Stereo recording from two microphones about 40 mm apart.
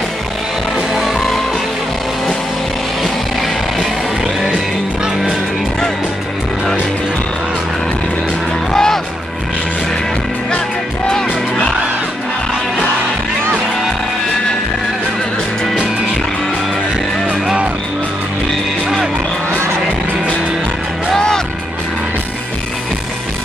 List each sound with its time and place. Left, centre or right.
1.1 s music: centre
8.7 s music: centre
11.1 s music: centre